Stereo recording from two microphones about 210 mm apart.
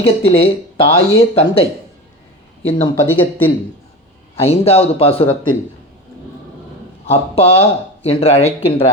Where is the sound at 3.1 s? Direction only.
10° left (ahead or behind).